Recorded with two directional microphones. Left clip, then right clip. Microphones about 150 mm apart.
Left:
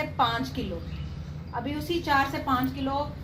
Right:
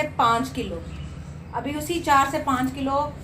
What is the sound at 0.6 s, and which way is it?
A woman's voice, 60° right (ahead or behind).